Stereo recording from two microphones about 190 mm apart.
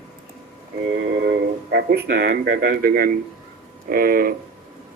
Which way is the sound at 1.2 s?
55° right (ahead or behind).